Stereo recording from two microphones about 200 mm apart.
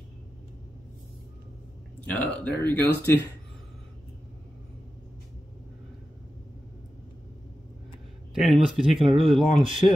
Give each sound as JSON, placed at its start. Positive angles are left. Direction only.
{"t": 2.0, "sound": "speech", "side_deg": 5}
{"t": 8.4, "sound": "speech", "side_deg": 0}
{"t": 9.6, "sound": "speech", "side_deg": -25}